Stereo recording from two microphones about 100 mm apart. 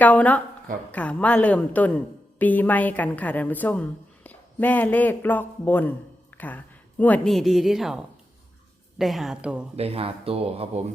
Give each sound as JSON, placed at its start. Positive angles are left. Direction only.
{"t": 0.0, "sound": "a woman's voice", "side_deg": 15}
{"t": 7.3, "sound": "a woman's voice", "side_deg": 0}
{"t": 9.7, "sound": "speech", "side_deg": -85}